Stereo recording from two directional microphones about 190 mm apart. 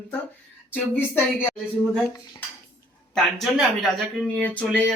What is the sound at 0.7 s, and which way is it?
Speech, 10° left (ahead or behind).